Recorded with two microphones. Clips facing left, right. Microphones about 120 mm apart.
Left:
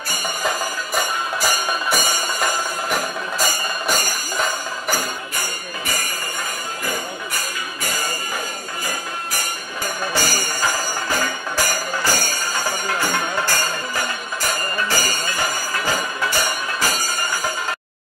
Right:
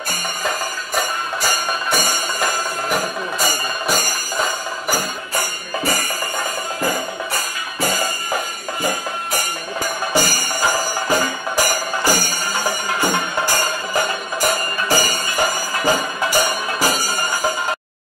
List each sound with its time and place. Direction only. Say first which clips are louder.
0.9 s music: right 1 dB; centre (ahead or behind)
2.9 s a sound: right 2 dB; centre (ahead or behind)
10.1 s music: right 5 dB; 15° right (ahead or behind)